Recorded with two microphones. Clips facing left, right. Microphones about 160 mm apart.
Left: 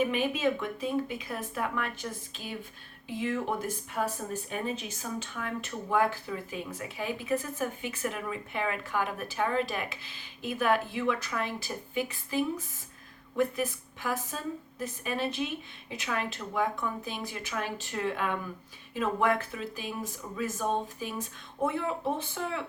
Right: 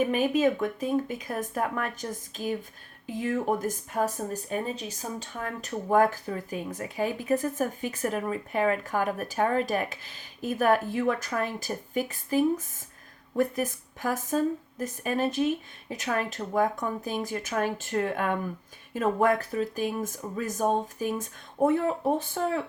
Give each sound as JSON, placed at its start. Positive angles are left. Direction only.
{"t": 0.0, "sound": "speech", "side_deg": -45}